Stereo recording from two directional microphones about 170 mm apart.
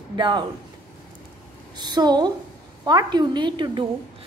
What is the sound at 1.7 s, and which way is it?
A woman's voice, 25° right (ahead or behind).